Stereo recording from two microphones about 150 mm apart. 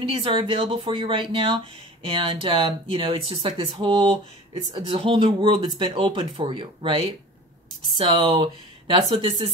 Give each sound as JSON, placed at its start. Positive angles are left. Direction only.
{"t": 0.0, "sound": "speech", "side_deg": -35}